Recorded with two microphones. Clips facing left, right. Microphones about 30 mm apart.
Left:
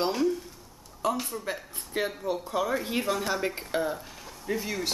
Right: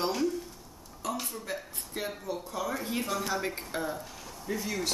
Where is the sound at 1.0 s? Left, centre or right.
Left.